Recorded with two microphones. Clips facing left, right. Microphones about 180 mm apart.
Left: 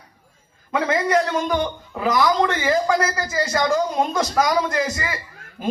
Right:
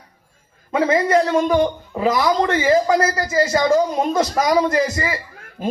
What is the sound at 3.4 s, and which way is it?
A man's voice, 25° right (ahead or behind).